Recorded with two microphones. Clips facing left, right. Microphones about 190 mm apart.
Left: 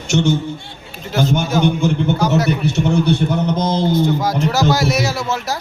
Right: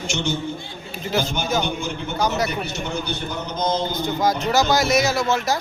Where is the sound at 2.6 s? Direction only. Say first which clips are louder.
Left 11 dB; 70° left (ahead or behind).